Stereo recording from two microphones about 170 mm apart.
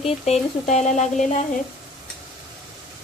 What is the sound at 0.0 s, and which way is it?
Speech, 40° left (ahead or behind).